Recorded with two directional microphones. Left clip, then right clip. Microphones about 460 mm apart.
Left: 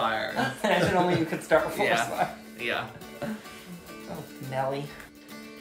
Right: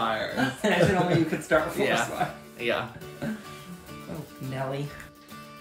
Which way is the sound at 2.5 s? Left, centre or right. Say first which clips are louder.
Right 3 dB; centre.